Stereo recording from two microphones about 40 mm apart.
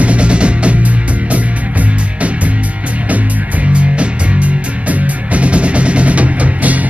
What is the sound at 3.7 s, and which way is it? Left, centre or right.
Music, right.